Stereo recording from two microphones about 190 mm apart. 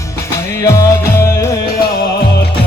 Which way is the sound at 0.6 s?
15° left (ahead or behind).